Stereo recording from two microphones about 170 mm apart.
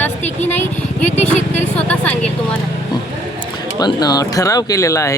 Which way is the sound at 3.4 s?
25° left (ahead or behind).